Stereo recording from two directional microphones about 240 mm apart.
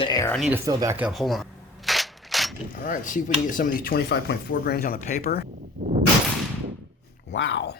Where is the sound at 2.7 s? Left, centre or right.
Left.